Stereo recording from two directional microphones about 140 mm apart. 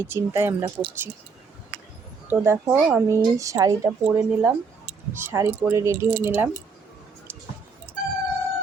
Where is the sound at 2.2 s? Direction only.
15° right (ahead or behind).